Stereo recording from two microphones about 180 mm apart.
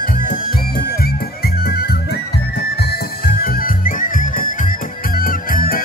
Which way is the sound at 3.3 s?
55° left (ahead or behind).